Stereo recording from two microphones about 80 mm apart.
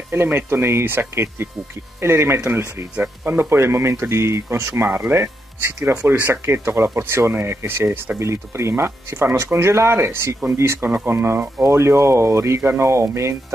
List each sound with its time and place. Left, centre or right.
0.1 s speech: right